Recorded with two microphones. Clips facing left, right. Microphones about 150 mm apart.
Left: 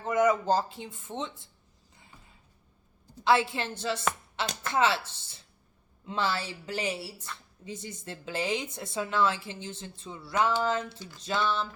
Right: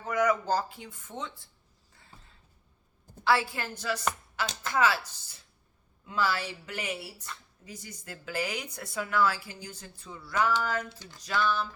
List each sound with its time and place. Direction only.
0.0 s speech: 25° left (ahead or behind)
3.2 s a woman's voice: 20° left (ahead or behind)